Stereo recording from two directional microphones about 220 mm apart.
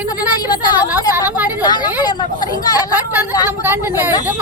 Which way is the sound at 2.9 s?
10° right (ahead or behind).